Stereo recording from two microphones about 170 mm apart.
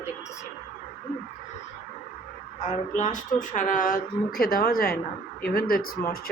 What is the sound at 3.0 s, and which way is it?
Speech, 45° left (ahead or behind).